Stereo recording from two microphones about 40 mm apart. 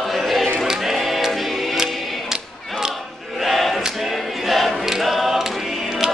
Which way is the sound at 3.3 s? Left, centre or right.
Centre.